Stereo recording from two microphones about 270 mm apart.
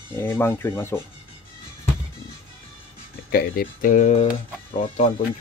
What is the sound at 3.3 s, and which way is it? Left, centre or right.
Speech, left.